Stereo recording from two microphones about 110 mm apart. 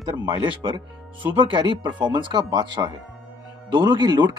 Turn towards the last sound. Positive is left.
turn(degrees=-45)  # may be behind; listen again after turning